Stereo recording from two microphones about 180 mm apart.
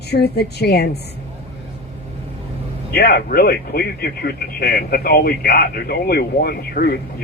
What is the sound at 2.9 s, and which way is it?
Speech, 60° left (ahead or behind).